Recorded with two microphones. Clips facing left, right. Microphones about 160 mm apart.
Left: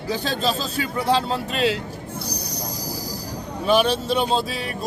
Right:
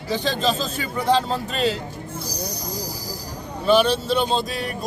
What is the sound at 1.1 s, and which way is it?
Speech, 5° left (ahead or behind).